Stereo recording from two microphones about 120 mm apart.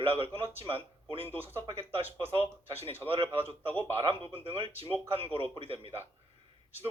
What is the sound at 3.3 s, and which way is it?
A man's voice, 50° right (ahead or behind).